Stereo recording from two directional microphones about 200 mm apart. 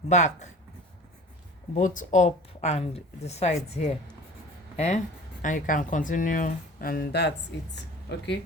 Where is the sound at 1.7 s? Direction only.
40° left (ahead or behind).